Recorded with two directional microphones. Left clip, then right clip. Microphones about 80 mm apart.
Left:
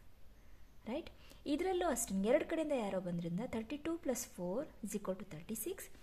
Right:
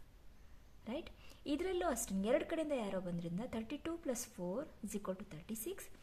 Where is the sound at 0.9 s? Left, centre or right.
Left.